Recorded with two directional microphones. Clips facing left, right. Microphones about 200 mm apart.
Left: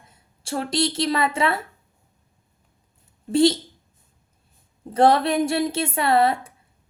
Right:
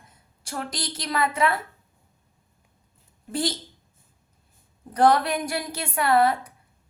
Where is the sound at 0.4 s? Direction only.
25° left (ahead or behind).